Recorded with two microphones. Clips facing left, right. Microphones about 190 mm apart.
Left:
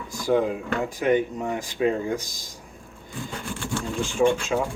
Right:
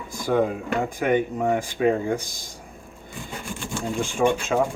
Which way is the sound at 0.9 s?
50° right (ahead or behind).